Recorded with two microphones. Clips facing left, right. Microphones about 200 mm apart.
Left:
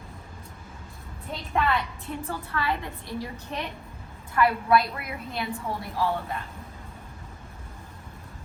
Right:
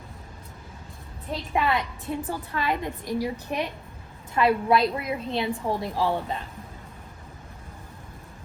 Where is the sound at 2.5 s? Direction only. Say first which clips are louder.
Right 1 dB; 15° right (ahead or behind).